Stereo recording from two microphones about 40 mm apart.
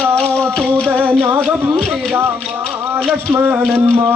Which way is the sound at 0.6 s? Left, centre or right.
Left.